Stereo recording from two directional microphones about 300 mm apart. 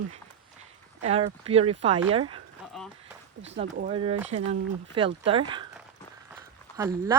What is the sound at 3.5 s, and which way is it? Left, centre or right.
Speech, right.